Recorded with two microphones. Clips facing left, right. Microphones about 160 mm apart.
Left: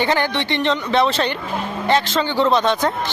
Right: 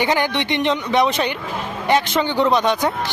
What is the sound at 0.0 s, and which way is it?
A man's voice, 15° right (ahead or behind).